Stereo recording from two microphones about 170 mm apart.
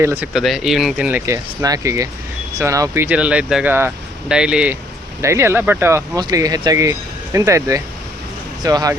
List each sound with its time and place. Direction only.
0.0 s speech: 15° right (ahead or behind)
0.3 s speech: centre (ahead or behind); by 9.0 s 20° right (ahead or behind)